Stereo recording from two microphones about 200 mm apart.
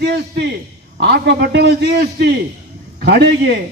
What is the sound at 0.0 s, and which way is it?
A man's voice, 55° right (ahead or behind).